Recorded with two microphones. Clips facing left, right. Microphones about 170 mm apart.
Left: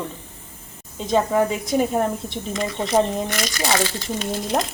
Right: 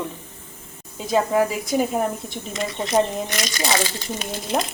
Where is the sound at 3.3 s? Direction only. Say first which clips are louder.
Left 1 dB; 20° right (ahead or behind).